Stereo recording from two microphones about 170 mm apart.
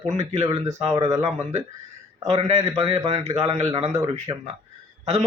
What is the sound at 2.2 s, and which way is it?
Speech, 40° right (ahead or behind).